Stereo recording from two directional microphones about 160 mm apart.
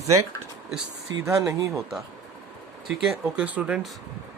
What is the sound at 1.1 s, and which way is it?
Speech, 25° right (ahead or behind).